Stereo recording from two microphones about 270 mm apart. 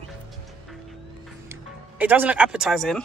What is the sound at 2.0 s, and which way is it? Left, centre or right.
A woman's voice, centre.